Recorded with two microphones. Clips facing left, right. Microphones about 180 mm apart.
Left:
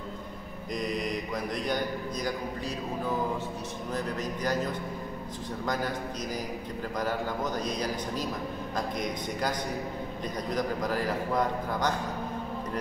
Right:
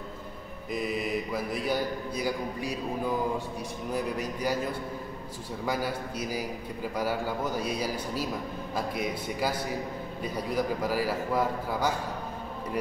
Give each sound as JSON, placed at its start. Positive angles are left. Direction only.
{"t": 0.7, "sound": "a man's voice", "side_deg": -5}